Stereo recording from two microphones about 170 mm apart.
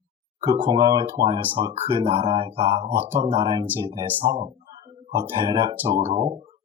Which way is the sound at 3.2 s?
30° right (ahead or behind).